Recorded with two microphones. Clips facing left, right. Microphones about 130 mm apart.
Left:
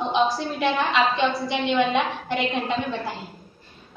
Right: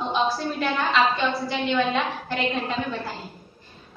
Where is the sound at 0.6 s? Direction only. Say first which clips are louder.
Left 1 dB; 20° left (ahead or behind).